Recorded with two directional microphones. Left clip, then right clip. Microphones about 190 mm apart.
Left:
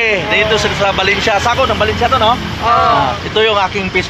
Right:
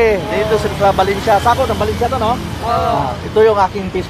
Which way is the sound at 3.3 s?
10° left (ahead or behind).